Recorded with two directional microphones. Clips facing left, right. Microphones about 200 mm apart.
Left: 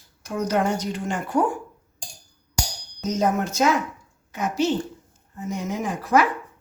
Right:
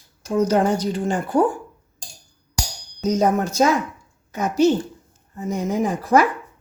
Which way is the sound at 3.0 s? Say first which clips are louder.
Right 4 dB; 35° right (ahead or behind).